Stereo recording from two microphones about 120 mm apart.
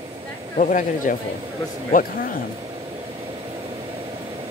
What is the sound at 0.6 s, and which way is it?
Speech, 90° left.